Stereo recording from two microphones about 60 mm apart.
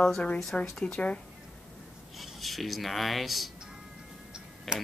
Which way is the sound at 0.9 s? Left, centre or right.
Centre.